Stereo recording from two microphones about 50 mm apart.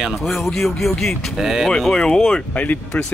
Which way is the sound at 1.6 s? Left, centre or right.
Centre.